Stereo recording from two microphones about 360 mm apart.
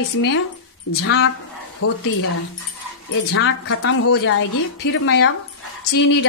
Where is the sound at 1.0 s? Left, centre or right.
Left.